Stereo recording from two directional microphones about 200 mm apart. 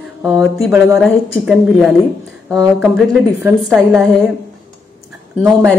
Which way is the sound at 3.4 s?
Centre (ahead or behind).